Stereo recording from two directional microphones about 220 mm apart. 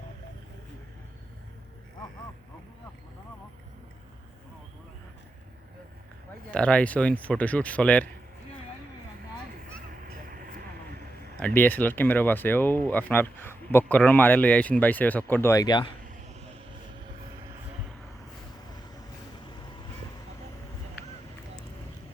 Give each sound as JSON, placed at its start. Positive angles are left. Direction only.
{"t": 6.5, "sound": "speech", "side_deg": 5}
{"t": 10.2, "sound": "vehicle", "side_deg": -40}
{"t": 11.3, "sound": "speech", "side_deg": 5}